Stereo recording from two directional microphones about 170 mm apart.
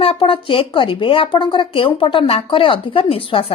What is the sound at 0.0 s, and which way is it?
Speech, 35° left (ahead or behind).